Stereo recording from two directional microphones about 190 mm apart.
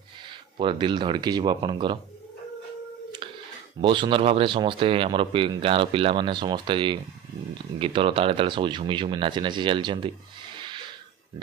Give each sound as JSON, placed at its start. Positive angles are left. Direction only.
{"t": 0.3, "sound": "speech", "side_deg": -25}
{"t": 3.8, "sound": "speech", "side_deg": -25}
{"t": 10.6, "sound": "a sound", "side_deg": -25}